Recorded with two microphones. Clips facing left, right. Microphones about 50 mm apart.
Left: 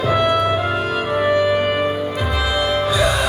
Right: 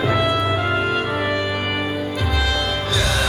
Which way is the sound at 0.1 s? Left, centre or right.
Centre.